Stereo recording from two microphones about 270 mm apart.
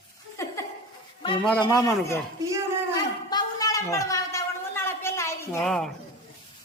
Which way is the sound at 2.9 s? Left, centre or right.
Centre.